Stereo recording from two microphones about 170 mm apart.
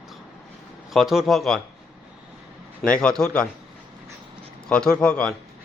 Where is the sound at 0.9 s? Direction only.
Centre (ahead or behind).